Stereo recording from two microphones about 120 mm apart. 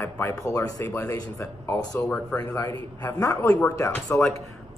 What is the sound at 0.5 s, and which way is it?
Speech, 30° left (ahead or behind).